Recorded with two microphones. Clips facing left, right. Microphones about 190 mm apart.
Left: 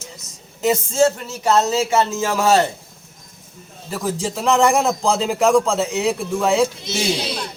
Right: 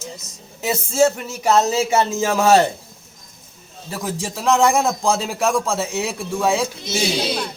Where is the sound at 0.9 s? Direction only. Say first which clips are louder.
Even; 10° right (ahead or behind).